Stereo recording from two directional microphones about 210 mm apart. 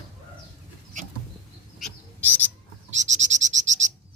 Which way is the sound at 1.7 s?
5° left (ahead or behind).